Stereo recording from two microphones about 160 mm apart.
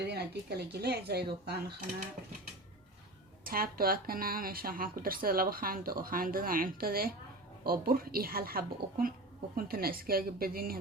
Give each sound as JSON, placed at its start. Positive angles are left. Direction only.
{"t": 0.1, "sound": "speech", "side_deg": -90}
{"t": 3.4, "sound": "speech", "side_deg": -65}